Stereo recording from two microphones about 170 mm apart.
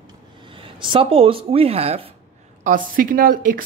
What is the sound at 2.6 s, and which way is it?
A woman's voice, 55° right (ahead or behind).